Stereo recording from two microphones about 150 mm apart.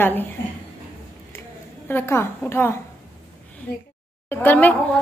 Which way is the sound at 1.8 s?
15° left (ahead or behind).